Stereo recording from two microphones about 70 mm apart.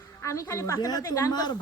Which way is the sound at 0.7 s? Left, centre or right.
Left.